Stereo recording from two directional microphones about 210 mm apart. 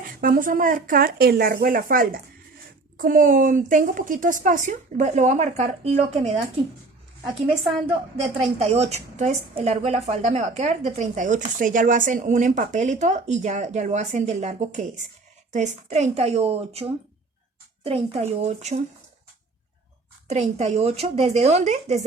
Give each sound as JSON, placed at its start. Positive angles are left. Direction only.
{"t": 0.2, "sound": "a woman's voice", "side_deg": -40}
{"t": 7.9, "sound": "a woman's voice", "side_deg": -25}
{"t": 20.2, "sound": "a woman's voice", "side_deg": -30}